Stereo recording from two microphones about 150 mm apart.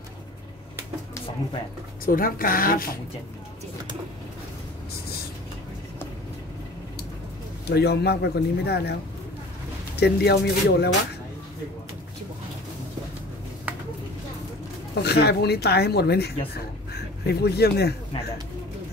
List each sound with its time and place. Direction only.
2.0 s speech: 70° left (ahead or behind)
7.6 s speech: 90° left
9.9 s speech: 90° left
15.0 s speech: 90° left